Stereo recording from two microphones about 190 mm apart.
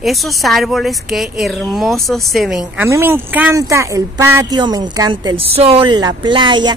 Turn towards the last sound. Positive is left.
turn(degrees=-25)  # may be behind; listen again after turning